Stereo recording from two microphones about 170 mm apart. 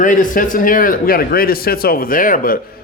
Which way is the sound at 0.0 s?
50° left (ahead or behind).